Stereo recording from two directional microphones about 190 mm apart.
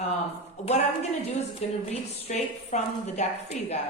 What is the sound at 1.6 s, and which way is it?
A woman's voice, 35° left (ahead or behind).